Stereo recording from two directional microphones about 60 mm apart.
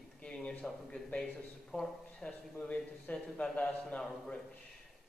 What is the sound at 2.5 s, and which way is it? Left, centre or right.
Speech, left.